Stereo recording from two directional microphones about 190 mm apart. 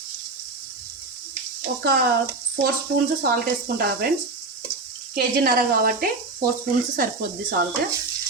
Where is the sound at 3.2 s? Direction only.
55° right (ahead or behind).